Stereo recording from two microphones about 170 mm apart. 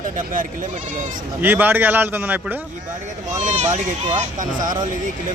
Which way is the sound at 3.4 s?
45° right (ahead or behind).